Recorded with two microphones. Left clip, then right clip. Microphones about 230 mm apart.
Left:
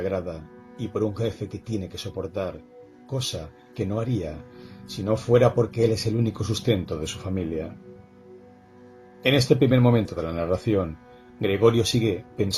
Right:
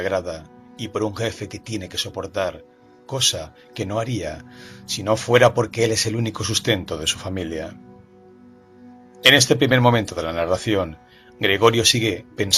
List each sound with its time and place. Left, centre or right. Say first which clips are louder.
0.0 s speech: right 5 dB; right
9.2 s speech: right 6 dB; right